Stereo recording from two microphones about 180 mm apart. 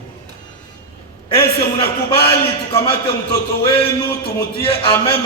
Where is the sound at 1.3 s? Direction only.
30° left (ahead or behind).